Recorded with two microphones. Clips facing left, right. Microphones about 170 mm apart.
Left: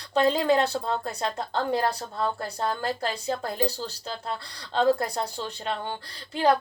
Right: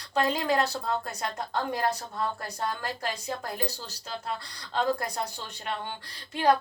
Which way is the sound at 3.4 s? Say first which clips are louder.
Left 6 dB; 30° left (ahead or behind).